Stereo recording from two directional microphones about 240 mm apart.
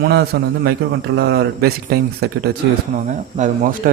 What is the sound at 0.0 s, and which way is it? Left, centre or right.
A man's voice, right.